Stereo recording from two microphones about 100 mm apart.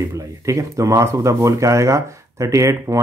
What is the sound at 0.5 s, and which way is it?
Speech, 30° right (ahead or behind).